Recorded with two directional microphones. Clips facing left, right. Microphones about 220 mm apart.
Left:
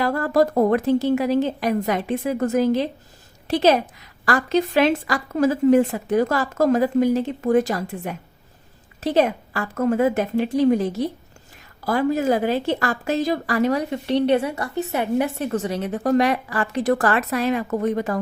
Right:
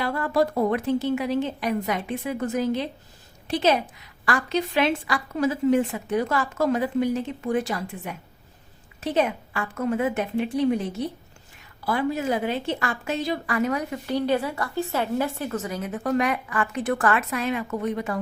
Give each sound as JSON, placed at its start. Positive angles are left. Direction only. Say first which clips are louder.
{"t": 0.0, "sound": "a woman's voice", "louder": "left 4 dB", "side_deg": 40}
{"t": 11.9, "sound": "a woman's voice", "louder": "left 5 dB", "side_deg": 45}